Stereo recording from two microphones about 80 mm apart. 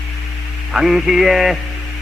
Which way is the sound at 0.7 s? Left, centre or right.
Centre.